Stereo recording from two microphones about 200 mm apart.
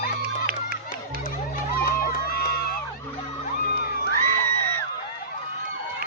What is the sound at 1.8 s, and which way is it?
Crowd, 50° left (ahead or behind).